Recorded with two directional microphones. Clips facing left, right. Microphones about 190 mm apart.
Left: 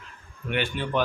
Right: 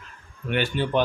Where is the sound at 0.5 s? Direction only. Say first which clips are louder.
Right 3 dB; 40° right (ahead or behind).